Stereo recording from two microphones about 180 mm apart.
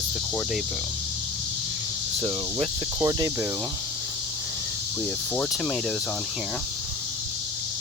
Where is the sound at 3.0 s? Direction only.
20° right (ahead or behind).